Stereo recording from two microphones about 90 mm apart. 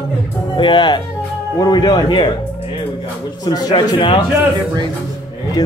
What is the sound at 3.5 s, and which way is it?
Speech, 50° left (ahead or behind).